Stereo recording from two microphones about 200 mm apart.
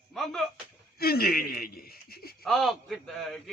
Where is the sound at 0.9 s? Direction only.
50° left (ahead or behind).